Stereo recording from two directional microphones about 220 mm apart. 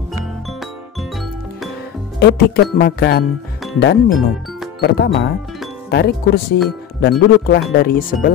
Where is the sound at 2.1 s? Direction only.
45° left (ahead or behind).